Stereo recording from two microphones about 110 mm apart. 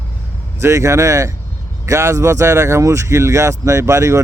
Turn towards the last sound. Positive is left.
turn(degrees=-25)  # may be behind; listen again after turning